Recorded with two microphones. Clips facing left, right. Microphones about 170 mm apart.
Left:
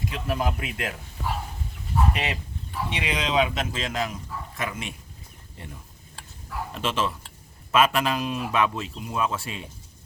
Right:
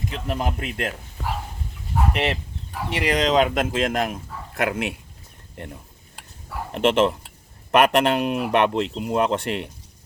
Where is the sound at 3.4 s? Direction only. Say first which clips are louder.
Right 7 dB; 55° right (ahead or behind).